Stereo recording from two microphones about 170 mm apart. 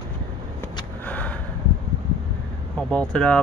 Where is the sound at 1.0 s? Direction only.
10° left (ahead or behind).